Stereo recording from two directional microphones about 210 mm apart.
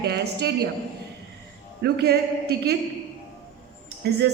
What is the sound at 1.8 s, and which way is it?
Speech, 50° right (ahead or behind).